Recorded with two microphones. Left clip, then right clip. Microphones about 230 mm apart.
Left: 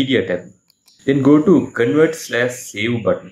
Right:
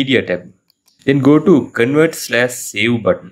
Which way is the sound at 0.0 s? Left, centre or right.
Right.